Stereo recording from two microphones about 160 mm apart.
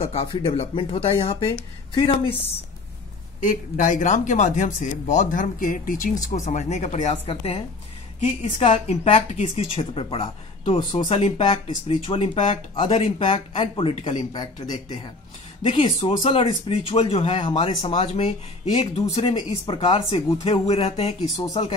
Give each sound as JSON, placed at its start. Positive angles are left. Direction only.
{"t": 0.0, "sound": "speech", "side_deg": 40}
{"t": 3.4, "sound": "speech", "side_deg": 55}